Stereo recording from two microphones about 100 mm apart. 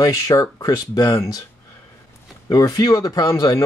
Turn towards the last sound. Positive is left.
turn(degrees=35)  # may be behind; listen again after turning